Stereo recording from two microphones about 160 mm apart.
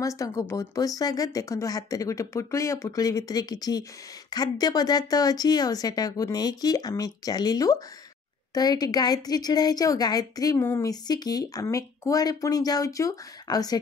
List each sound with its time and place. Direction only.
0.0 s a woman's voice: 20° left (ahead or behind)